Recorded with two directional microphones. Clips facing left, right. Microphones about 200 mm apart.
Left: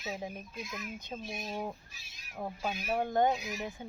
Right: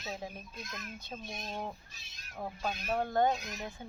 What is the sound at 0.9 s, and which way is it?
Speech, 15° left (ahead or behind).